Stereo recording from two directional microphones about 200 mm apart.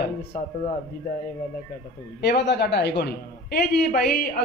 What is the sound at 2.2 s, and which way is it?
A man's voice, 55° left (ahead or behind).